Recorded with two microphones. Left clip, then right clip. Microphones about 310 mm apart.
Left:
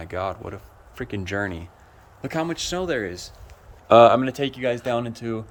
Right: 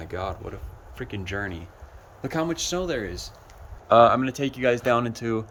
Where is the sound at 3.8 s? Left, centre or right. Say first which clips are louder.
Left 3 dB; left.